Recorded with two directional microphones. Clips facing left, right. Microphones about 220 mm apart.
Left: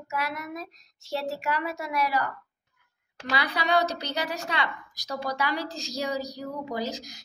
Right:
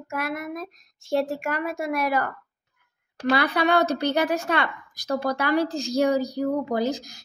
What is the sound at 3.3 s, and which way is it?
A woman's voice, 55° right (ahead or behind).